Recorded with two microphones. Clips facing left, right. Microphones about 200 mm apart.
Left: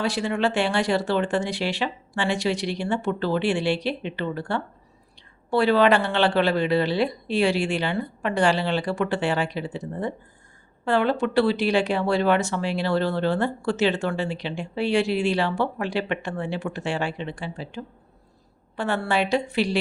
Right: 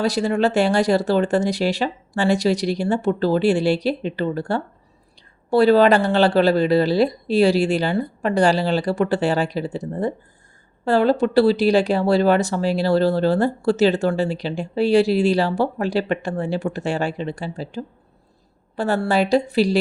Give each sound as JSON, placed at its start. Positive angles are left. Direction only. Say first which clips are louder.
{"t": 0.0, "sound": "speech", "louder": "right 5 dB", "side_deg": -40}